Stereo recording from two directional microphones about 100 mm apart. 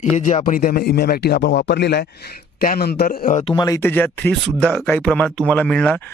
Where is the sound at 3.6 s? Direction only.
35° left (ahead or behind).